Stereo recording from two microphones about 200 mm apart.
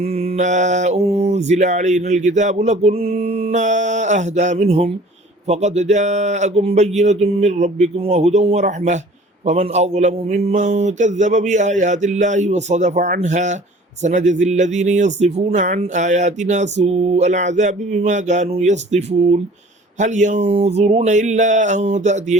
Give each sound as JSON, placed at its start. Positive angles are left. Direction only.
{"t": 0.0, "sound": "speech", "side_deg": -30}